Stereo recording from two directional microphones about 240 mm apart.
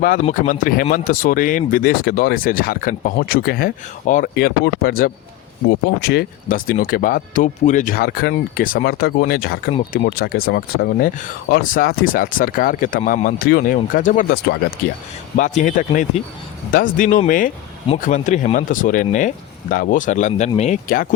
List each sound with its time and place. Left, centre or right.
0.0 s speech: left
15.4 s speech: left